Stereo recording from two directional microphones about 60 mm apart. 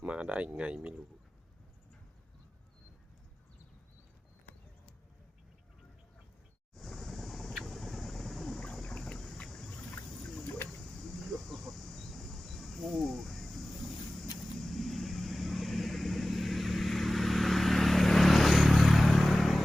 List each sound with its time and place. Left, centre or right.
0.0 s speech: right
6.7 s vehicle: centre
9.5 s boat: centre
11.2 s a sound: centre
14.3 s vehicle: centre